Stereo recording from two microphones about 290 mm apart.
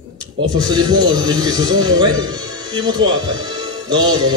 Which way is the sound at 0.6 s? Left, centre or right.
Centre.